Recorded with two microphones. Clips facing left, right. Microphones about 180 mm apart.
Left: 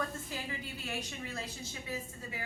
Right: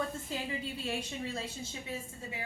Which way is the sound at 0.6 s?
30° right (ahead or behind).